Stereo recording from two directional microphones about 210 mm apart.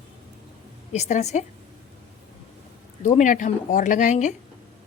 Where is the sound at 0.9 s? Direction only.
35° left (ahead or behind).